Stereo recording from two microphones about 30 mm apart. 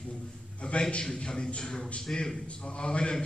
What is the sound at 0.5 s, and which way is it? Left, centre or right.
Speech, left.